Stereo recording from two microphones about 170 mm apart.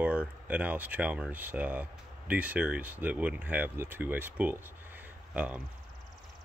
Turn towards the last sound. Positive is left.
turn(degrees=-10)  # may be behind; listen again after turning